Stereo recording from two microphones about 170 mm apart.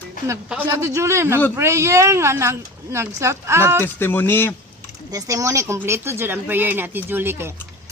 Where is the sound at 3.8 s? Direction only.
10° left (ahead or behind).